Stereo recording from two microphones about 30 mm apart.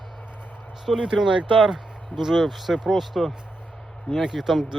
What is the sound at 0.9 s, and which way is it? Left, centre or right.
Speech, centre.